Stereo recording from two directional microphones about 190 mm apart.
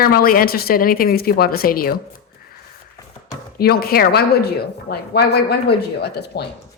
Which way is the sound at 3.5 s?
55° left (ahead or behind).